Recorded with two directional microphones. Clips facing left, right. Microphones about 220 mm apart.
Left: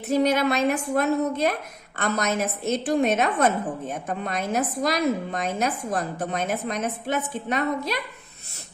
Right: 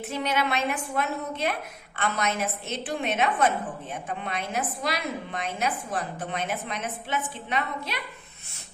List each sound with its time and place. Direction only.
0.1 s a woman's voice: 40° left (ahead or behind)